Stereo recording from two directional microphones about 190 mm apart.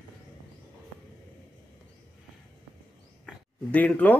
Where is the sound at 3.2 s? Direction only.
5° left (ahead or behind).